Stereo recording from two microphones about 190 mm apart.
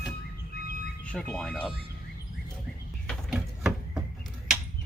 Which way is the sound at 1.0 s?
5° left (ahead or behind).